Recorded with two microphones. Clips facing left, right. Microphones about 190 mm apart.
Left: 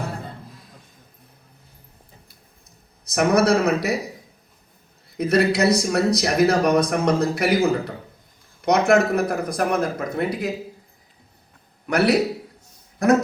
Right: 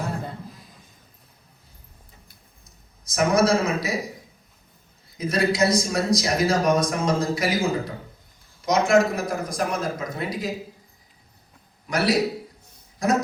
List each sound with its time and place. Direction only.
0.5 s a sound: centre (ahead or behind)
2.6 s a man's voice: 60° left (ahead or behind)
5.1 s speech: 65° left (ahead or behind)
11.9 s speech: 60° left (ahead or behind)